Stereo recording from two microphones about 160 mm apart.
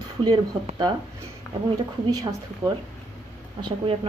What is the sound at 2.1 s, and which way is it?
Speech, 20° right (ahead or behind).